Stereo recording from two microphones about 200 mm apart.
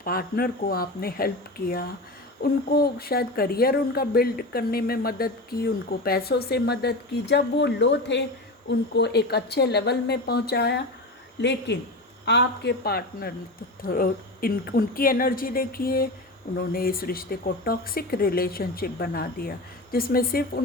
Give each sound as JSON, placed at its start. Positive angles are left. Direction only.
{"t": 0.0, "sound": "a woman's voice", "side_deg": 45}